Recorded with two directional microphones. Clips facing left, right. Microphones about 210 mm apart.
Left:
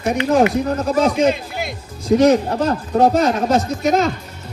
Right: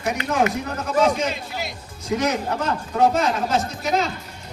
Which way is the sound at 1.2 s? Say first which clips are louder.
Left 9 dB; 55° left (ahead or behind).